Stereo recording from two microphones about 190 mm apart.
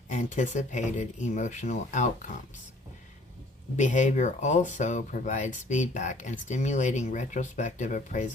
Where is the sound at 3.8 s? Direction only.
40° left (ahead or behind).